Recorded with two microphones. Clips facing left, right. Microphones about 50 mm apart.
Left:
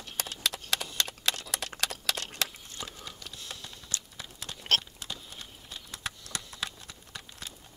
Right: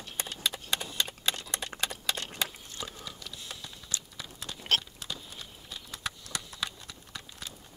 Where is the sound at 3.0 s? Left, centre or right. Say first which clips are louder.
Even; left.